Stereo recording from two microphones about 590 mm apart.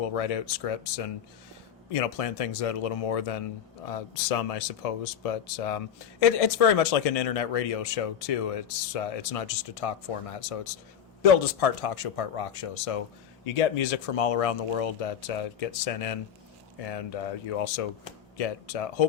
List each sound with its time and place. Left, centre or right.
0.0 s speech: left
3.8 s speech: left
13.4 s speech: left